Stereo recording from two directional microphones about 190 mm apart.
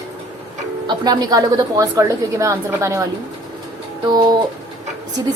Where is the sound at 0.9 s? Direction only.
20° right (ahead or behind).